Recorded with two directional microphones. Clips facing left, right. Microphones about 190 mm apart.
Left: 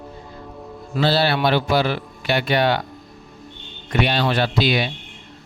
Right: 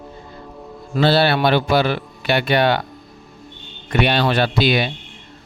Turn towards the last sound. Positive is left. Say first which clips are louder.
# right 2 dB
turn(degrees=-60)  # may be behind; listen again after turning